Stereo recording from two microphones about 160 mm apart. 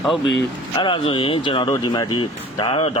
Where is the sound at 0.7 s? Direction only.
30° left (ahead or behind).